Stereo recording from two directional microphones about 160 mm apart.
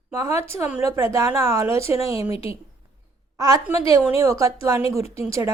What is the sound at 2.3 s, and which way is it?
Speech, 35° left (ahead or behind).